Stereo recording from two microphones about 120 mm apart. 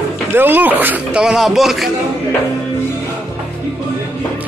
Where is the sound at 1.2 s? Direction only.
5° right (ahead or behind).